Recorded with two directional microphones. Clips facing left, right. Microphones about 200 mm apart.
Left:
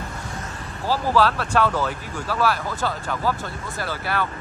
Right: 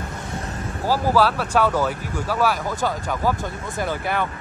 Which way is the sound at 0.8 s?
10° right (ahead or behind).